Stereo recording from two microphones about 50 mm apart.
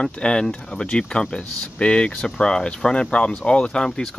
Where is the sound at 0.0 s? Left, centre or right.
Centre.